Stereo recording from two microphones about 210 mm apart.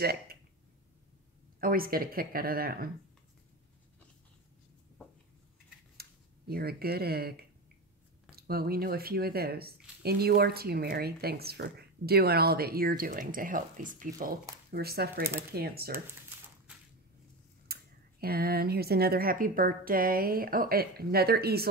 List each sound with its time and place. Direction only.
0.0 s speech: 50° right (ahead or behind)
1.6 s speech: 45° right (ahead or behind)
5.9 s speech: 45° right (ahead or behind)
17.7 s tick-tock: 45° right (ahead or behind)
18.2 s speech: 45° right (ahead or behind)